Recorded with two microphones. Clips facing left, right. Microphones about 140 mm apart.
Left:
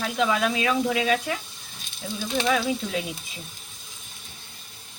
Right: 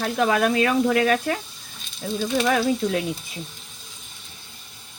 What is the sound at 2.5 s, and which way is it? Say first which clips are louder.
Speech: right 2 dB; 50° right (ahead or behind).